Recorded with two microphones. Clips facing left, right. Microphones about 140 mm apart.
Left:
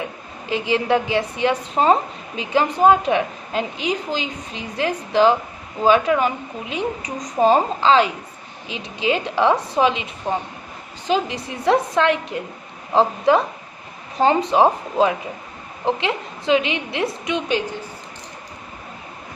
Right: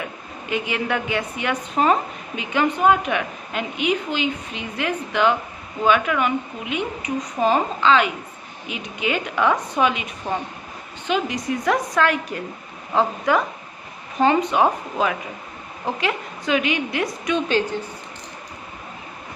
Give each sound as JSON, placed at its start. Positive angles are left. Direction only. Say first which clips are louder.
{"t": 0.5, "sound": "a woman's voice", "louder": "left 5 dB", "side_deg": 30}